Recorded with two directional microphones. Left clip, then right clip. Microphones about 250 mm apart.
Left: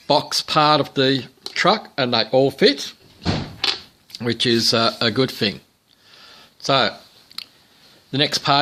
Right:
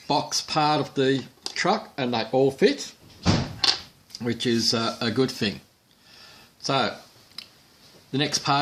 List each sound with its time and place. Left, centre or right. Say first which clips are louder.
0.1 s speech: left 6 dB; left
4.1 s speech: left 7 dB; left
6.1 s a sound: left 4 dB; left
8.1 s speech: left 6 dB; left